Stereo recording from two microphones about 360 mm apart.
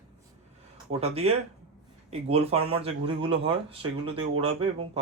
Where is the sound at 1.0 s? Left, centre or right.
Centre.